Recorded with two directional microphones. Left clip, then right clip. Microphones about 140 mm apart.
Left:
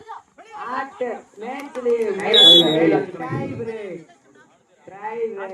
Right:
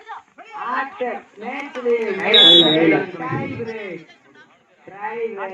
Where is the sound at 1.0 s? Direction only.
45° right (ahead or behind).